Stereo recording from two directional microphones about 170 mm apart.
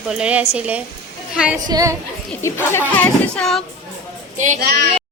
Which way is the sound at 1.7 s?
20° right (ahead or behind).